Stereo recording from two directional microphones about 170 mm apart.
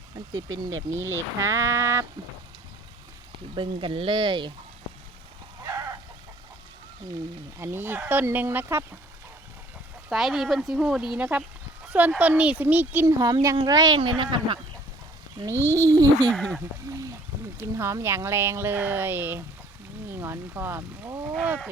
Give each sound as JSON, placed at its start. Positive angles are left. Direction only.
{"t": 0.3, "sound": "speech", "side_deg": -20}
{"t": 3.5, "sound": "speech", "side_deg": -30}
{"t": 5.6, "sound": "chicken", "side_deg": -15}
{"t": 7.6, "sound": "speech", "side_deg": -15}
{"t": 10.1, "sound": "speech", "side_deg": 0}
{"t": 15.4, "sound": "speech", "side_deg": -15}
{"t": 16.3, "sound": "speech", "side_deg": 0}
{"t": 16.9, "sound": "speech", "side_deg": -20}